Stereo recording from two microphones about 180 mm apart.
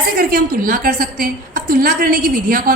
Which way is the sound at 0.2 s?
55° right (ahead or behind).